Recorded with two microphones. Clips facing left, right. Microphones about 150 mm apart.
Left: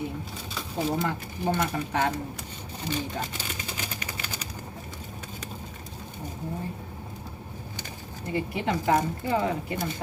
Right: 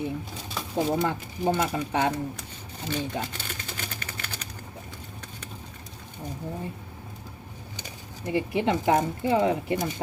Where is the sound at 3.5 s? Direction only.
10° left (ahead or behind).